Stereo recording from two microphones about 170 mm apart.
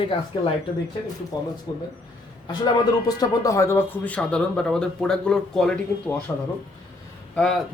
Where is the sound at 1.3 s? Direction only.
25° left (ahead or behind).